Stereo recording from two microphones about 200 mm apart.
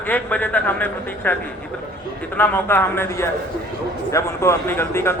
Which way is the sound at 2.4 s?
10° left (ahead or behind).